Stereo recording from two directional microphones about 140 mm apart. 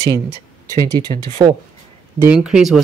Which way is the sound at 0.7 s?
30° right (ahead or behind).